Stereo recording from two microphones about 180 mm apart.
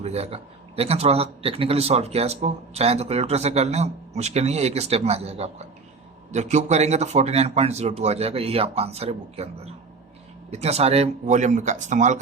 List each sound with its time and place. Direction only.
0.0 s a man's voice: 35° right (ahead or behind)
10.5 s a man's voice: 35° right (ahead or behind)